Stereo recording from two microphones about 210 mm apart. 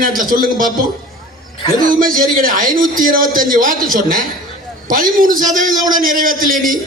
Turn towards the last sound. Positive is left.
turn(degrees=-40)  # may be behind; listen again after turning